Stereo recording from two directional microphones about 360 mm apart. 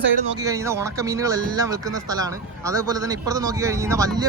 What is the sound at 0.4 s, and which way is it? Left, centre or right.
Speech, centre.